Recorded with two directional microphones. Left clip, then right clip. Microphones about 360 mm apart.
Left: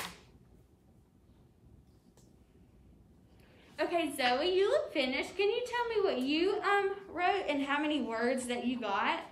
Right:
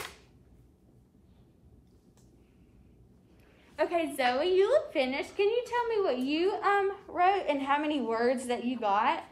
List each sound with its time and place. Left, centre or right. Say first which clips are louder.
3.7 s a woman's voice: right 3 dB; centre